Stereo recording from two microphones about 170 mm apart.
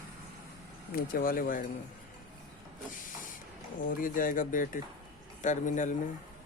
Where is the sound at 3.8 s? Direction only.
55° left (ahead or behind).